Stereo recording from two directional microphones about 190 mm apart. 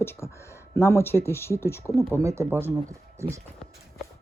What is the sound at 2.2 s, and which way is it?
Speech, 15° right (ahead or behind).